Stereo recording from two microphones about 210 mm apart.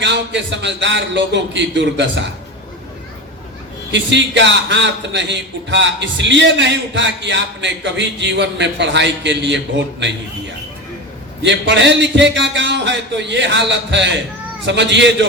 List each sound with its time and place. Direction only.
0.0 s a man's voice: 60° right (ahead or behind)
3.9 s a man's voice: 60° right (ahead or behind)
11.4 s a man's voice: 60° right (ahead or behind)